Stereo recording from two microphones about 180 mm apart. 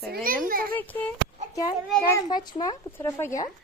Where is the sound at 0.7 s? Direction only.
10° left (ahead or behind).